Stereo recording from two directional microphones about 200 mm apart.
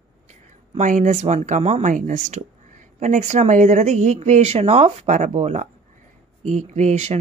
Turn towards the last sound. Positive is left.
turn(degrees=-35)  # may be behind; listen again after turning